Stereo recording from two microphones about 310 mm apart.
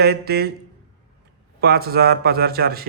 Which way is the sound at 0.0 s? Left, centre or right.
Right.